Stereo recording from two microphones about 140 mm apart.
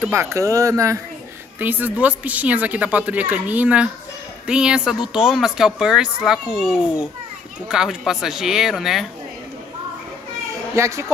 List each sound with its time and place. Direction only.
0.1 s a woman's voice: 20° right (ahead or behind); by 9.0 s centre (ahead or behind)
10.8 s speech: 20° right (ahead or behind)